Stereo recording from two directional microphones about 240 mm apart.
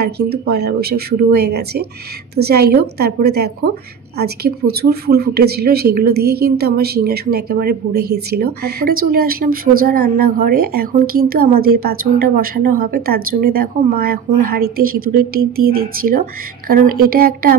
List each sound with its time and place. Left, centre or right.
0.0 s a woman's voice: right